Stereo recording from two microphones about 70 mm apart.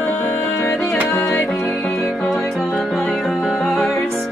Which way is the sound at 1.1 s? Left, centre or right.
Left.